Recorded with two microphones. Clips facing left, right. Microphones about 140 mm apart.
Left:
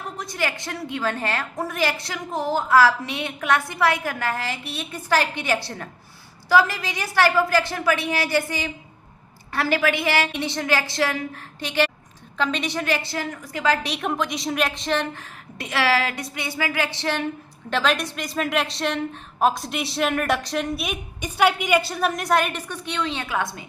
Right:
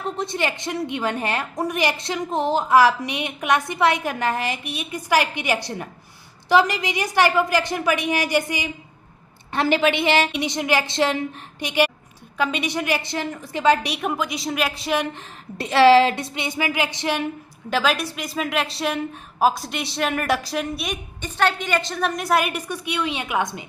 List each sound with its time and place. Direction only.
0.2 s a woman's voice: 25° right (ahead or behind)
13.8 s a woman's voice: 5° right (ahead or behind)
15.1 s a woman's voice: 25° right (ahead or behind)